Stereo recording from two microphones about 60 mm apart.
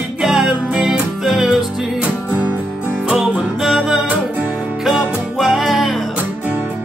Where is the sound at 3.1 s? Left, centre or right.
Centre.